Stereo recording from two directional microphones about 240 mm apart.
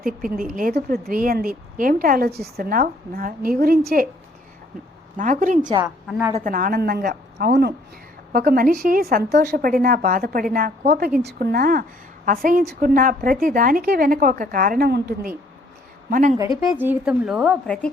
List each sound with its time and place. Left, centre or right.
0.0 s a woman's voice: right
5.1 s a woman's voice: right
5.6 s a woman's voice: centre
6.1 s a woman's voice: centre
6.3 s a woman's voice: right
16.6 s a woman's voice: centre